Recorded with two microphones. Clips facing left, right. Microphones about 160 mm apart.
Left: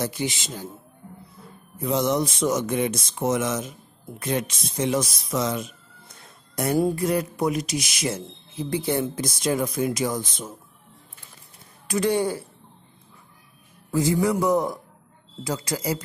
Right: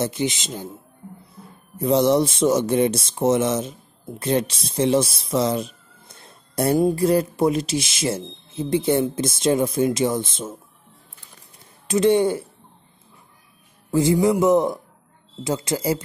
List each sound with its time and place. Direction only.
0.0 s speech: 20° right (ahead or behind)
1.8 s speech: 30° right (ahead or behind)
11.9 s speech: 25° right (ahead or behind)
13.9 s speech: 25° right (ahead or behind)